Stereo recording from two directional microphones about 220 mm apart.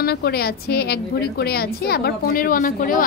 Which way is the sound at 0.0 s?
45° left (ahead or behind).